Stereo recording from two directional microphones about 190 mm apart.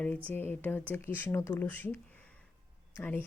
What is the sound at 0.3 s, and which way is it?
Speech, 10° left (ahead or behind).